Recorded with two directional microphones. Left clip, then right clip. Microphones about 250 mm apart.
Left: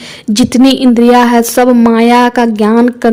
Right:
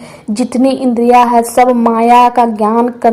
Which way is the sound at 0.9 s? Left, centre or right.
Left.